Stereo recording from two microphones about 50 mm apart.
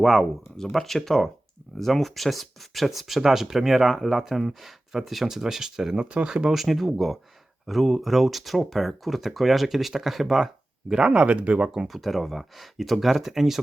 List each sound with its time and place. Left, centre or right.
0.0 s speech: centre
6.1 s speech: right
6.5 s speech: centre; by 11.7 s right
11.7 s speech: centre